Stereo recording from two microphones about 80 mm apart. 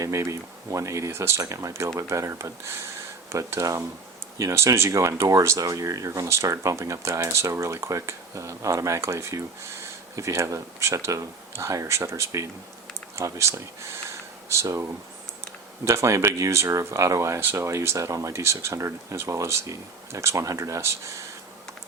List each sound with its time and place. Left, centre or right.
0.0 s speech: right